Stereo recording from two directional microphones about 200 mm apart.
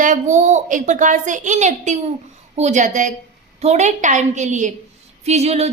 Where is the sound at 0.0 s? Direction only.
40° right (ahead or behind).